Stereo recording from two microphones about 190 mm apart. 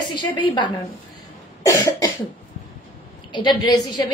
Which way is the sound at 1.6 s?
20° left (ahead or behind).